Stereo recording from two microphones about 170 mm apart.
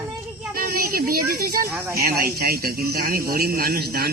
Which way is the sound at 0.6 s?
60° right (ahead or behind).